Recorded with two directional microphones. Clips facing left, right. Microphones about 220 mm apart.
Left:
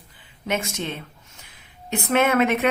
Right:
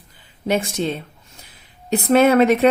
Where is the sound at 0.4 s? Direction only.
35° right (ahead or behind).